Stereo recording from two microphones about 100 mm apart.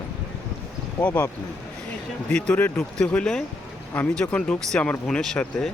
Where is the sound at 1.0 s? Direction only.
15° left (ahead or behind).